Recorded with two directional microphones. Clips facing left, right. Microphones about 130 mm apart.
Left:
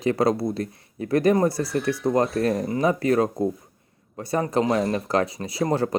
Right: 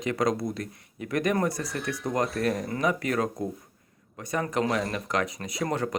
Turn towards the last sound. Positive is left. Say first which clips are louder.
# left 5 dB
turn(degrees=30)  # may be behind; listen again after turning